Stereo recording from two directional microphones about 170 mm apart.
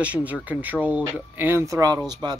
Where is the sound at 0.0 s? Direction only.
10° right (ahead or behind).